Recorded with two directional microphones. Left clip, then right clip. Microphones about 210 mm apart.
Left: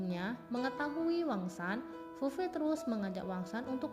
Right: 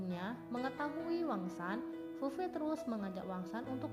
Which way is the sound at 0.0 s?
45° left (ahead or behind).